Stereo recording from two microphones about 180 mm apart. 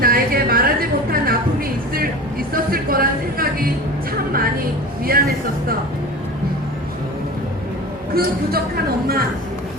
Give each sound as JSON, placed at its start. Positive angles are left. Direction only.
{"t": 0.0, "sound": "a sound", "side_deg": -55}
{"t": 2.5, "sound": "music", "side_deg": -55}
{"t": 5.1, "sound": "speech", "side_deg": -55}
{"t": 8.1, "sound": "speech", "side_deg": -55}